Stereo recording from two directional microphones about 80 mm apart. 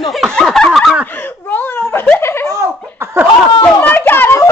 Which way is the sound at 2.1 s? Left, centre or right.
Left.